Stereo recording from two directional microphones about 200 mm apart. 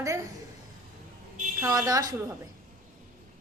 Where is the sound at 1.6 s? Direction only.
15° right (ahead or behind).